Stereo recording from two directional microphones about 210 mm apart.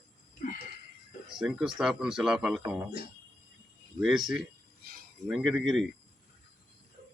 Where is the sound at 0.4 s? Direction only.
40° left (ahead or behind).